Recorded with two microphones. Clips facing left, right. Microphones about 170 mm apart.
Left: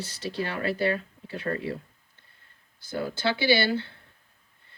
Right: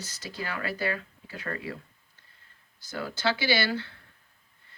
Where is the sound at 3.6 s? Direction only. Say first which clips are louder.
Left 3 dB; 25° left (ahead or behind).